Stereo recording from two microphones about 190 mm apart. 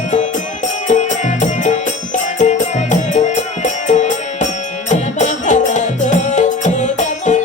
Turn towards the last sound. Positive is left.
turn(degrees=40)  # may be behind; listen again after turning